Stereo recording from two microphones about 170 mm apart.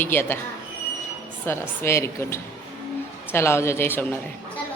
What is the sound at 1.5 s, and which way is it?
A woman's voice, 15° left (ahead or behind).